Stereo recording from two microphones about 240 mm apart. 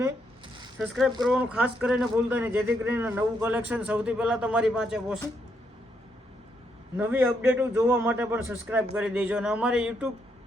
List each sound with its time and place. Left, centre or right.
0.0 s a sound: centre
0.8 s speech: centre
6.9 s a man's voice: centre